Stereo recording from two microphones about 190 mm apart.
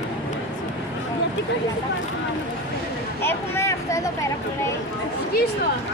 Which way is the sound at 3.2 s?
15° left (ahead or behind).